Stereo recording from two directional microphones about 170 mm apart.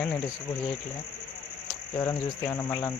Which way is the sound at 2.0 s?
25° left (ahead or behind).